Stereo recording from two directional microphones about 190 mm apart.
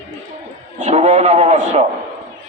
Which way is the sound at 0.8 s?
35° right (ahead or behind).